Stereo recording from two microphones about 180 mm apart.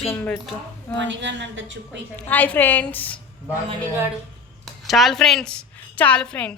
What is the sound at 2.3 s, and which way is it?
Speech, 10° left (ahead or behind).